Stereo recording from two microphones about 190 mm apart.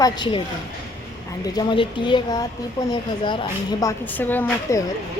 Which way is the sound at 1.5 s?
25° left (ahead or behind).